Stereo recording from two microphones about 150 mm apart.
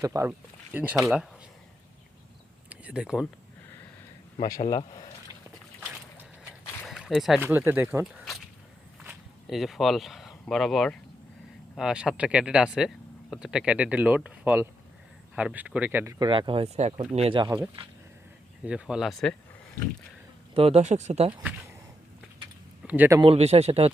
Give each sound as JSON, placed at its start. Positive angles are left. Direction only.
{"t": 0.0, "sound": "speech", "side_deg": -20}
{"t": 0.3, "sound": "speech", "side_deg": -10}
{"t": 2.6, "sound": "a sound", "side_deg": -10}
{"t": 4.4, "sound": "speech", "side_deg": 85}
{"t": 4.7, "sound": "speech", "side_deg": 35}
{"t": 6.8, "sound": "a sound", "side_deg": 0}
{"t": 7.3, "sound": "speech", "side_deg": -15}
{"t": 8.0, "sound": "a sound", "side_deg": 0}
{"t": 9.0, "sound": "speech", "side_deg": 0}
{"t": 18.6, "sound": "speech", "side_deg": -5}
{"t": 20.5, "sound": "speech", "side_deg": -40}
{"t": 22.9, "sound": "speech", "side_deg": -10}
{"t": 23.2, "sound": "speech", "side_deg": -45}